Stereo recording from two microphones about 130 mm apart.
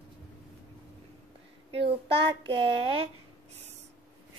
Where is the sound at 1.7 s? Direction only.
45° right (ahead or behind).